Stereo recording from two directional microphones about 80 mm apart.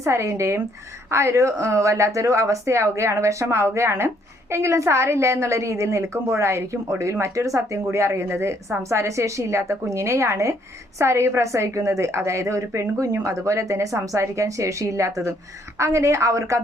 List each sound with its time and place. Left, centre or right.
0.0 s speech: right